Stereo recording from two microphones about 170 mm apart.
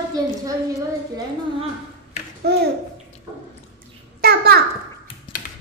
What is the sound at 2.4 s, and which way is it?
Babbling, 75° right (ahead or behind).